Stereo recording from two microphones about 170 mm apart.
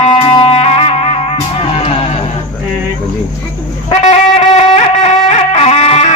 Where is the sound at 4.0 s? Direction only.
40° left (ahead or behind).